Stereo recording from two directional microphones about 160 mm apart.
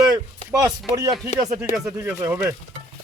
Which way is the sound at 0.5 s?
20° right (ahead or behind).